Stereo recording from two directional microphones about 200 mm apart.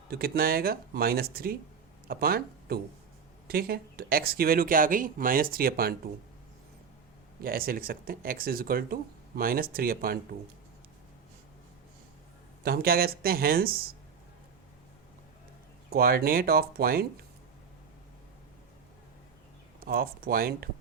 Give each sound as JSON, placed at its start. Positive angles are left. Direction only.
{"t": 0.1, "sound": "speech", "side_deg": -50}
{"t": 7.4, "sound": "speech", "side_deg": -45}
{"t": 12.6, "sound": "speech", "side_deg": -50}
{"t": 15.9, "sound": "speech", "side_deg": -50}
{"t": 19.8, "sound": "speech", "side_deg": -50}